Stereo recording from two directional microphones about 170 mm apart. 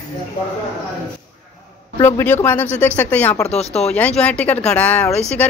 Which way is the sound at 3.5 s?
40° left (ahead or behind).